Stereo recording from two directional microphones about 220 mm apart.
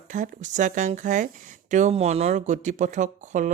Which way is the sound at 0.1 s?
35° right (ahead or behind).